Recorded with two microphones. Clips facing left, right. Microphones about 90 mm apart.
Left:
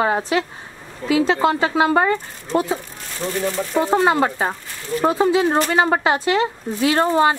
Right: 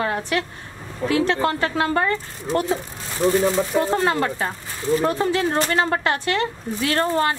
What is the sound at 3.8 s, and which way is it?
A woman's voice, 20° left (ahead or behind).